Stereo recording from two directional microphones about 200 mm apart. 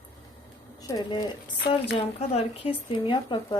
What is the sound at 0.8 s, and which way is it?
Speech, 20° left (ahead or behind).